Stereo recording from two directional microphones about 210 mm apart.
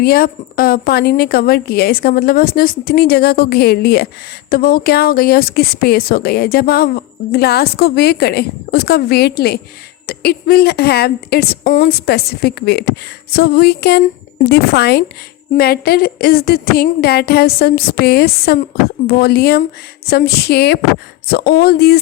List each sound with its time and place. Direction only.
0.0 s a woman's voice: 45° left (ahead or behind)